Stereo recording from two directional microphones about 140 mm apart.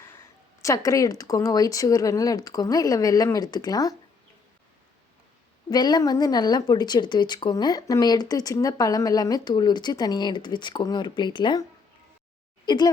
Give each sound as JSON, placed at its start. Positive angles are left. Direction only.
{"t": 0.6, "sound": "speech", "side_deg": 25}
{"t": 5.7, "sound": "speech", "side_deg": 30}
{"t": 12.6, "sound": "speech", "side_deg": 30}